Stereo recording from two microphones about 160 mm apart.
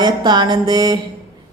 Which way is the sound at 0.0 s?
25° right (ahead or behind).